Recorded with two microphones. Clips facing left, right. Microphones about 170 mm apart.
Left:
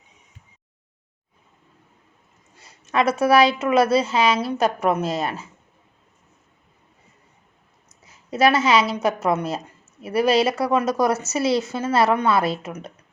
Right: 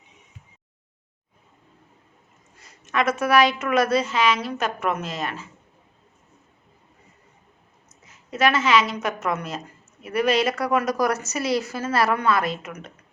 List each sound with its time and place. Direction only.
2.6 s a woman's voice: 30° left (ahead or behind)
8.0 s a woman's voice: 35° left (ahead or behind)